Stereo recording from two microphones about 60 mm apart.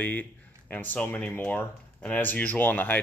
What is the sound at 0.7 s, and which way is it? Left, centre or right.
Speech, left.